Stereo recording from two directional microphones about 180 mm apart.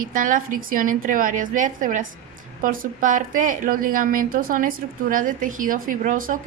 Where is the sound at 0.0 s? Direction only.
50° right (ahead or behind).